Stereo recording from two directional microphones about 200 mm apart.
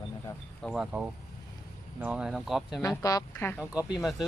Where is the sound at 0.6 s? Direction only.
Centre (ahead or behind).